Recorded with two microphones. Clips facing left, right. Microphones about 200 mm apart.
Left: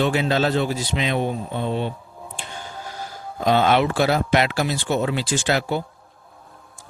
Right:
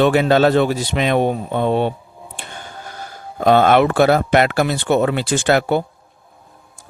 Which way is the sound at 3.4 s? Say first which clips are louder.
Right 5 dB; 55° right (ahead or behind).